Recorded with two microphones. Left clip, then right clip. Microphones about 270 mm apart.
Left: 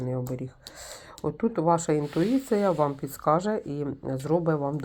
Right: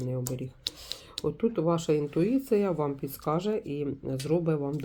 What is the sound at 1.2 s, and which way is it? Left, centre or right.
Speech, centre.